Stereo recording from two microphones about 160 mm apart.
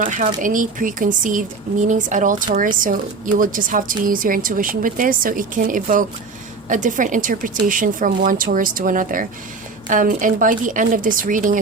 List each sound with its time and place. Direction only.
0.0 s a woman's voice: 55° right (ahead or behind)